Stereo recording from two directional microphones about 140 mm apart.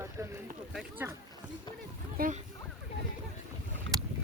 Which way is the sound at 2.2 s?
90° right.